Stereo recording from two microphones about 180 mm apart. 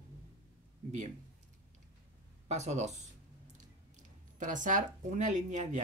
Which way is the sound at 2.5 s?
40° right (ahead or behind).